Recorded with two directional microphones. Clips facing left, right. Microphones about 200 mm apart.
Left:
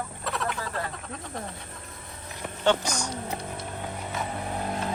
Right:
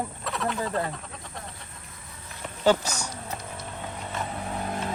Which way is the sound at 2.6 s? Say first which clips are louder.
Right 2 dB; 5° right (ahead or behind).